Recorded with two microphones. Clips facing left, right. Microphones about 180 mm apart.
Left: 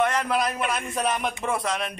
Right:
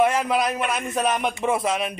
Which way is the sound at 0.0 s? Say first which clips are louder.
Right 3 dB; 5° right (ahead or behind).